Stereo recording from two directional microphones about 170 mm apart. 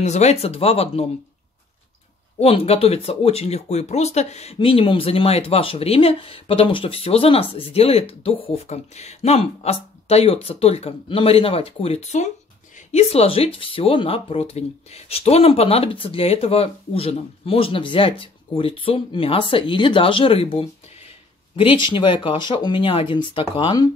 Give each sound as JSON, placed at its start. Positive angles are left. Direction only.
{"t": 0.0, "sound": "speech", "side_deg": 40}
{"t": 2.4, "sound": "speech", "side_deg": 35}